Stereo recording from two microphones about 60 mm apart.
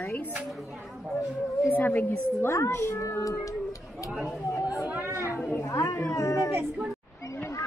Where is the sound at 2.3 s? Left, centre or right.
Left.